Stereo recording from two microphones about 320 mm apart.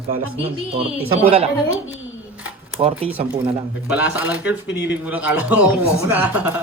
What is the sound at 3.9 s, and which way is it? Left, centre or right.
A man's voice, centre.